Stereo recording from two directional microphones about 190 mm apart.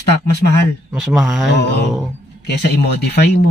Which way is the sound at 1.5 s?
65° left (ahead or behind).